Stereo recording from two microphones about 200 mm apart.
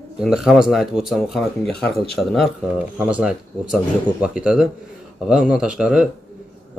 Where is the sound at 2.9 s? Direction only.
5° right (ahead or behind).